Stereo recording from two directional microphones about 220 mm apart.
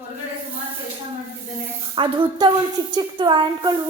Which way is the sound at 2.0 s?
20° right (ahead or behind).